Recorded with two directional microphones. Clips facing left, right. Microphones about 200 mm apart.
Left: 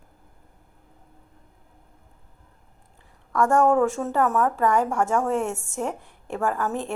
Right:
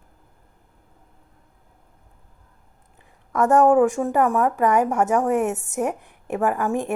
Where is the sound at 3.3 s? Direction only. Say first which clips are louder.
Right 3 dB; 20° right (ahead or behind).